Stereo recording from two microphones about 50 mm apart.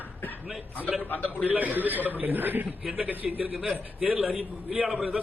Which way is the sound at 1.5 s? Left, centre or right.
Right.